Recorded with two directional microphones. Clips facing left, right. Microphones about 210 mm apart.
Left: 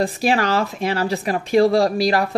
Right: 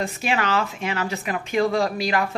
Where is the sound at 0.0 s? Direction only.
35° left (ahead or behind).